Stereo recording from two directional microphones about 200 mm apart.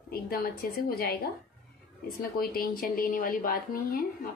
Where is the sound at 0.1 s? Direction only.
50° left (ahead or behind).